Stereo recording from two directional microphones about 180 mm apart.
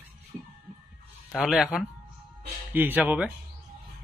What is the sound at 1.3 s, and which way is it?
Speech, centre (ahead or behind).